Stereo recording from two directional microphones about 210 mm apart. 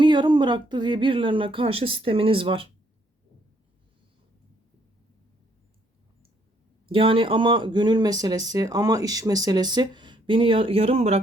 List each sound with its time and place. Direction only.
0.0 s speech: 20° right (ahead or behind)
6.8 s speech: 25° right (ahead or behind)